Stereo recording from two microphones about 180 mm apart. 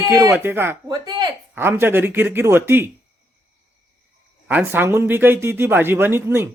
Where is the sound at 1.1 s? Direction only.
25° right (ahead or behind).